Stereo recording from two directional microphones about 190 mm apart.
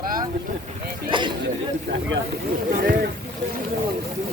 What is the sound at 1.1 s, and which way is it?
Speech, 25° right (ahead or behind).